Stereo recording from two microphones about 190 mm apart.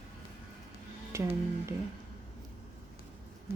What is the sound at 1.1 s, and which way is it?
Speech, 15° right (ahead or behind).